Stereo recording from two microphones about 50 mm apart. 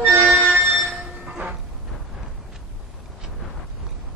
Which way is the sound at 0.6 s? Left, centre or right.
Centre.